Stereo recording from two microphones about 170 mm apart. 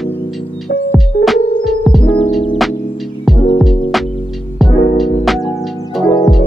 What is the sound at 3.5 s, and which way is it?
Music, centre (ahead or behind).